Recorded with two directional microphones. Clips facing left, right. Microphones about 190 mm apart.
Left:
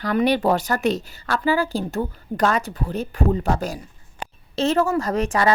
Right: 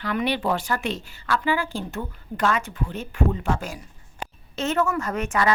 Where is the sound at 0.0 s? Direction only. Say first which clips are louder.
Left 6 dB; 40° left (ahead or behind).